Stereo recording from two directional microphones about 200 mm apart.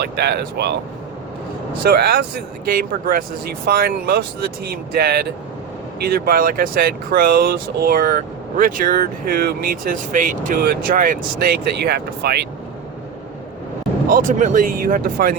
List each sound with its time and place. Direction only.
0.0 s speech: 55° right (ahead or behind)
1.8 s speech: 50° right (ahead or behind)
14.1 s speech: 40° right (ahead or behind)